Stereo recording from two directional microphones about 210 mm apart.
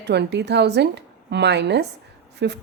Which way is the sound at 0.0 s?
55° right (ahead or behind).